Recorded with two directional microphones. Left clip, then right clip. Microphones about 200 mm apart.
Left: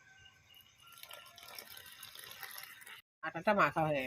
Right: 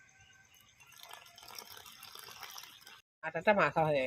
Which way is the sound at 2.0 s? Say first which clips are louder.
Even; 5° right (ahead or behind).